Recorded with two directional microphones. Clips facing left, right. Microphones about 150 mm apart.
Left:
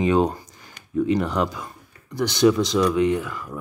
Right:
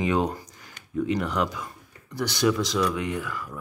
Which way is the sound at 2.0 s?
20° left (ahead or behind).